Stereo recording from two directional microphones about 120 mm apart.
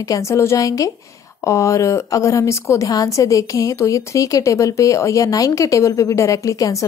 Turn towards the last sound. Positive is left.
turn(degrees=30)  # may be behind; listen again after turning